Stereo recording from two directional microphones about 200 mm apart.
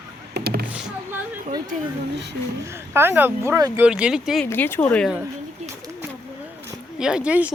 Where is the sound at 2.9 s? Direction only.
10° right (ahead or behind).